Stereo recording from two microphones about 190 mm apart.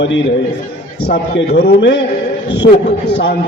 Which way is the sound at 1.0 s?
60° left (ahead or behind).